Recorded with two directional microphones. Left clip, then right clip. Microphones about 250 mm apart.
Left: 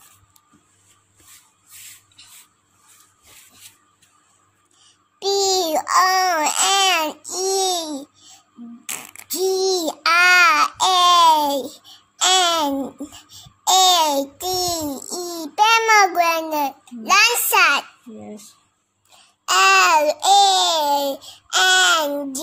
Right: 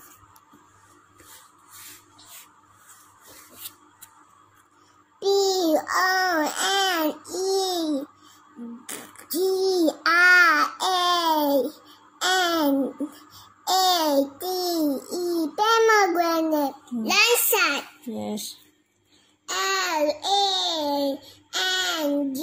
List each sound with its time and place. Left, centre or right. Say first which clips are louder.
5.2 s a sound: left 1 dB; left
5.8 s babbling: left 6 dB; left
7.2 s baby cry: left 4 dB; left
8.8 s a sound: left 6 dB; left
9.8 s babbling: left 3 dB; left
13.7 s a sound: left 6 dB; left
14.5 s babbling: left 5 dB; left
15.5 s child singing: left 5 dB; left
18.2 s a sound: right 7 dB; centre
19.4 s babbling: left 12 dB; left
20.9 s babbling: left 5 dB; left
21.5 s babbling: left 10 dB; left